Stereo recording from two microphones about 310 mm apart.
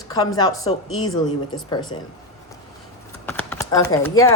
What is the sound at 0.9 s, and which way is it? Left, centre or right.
Speech, left.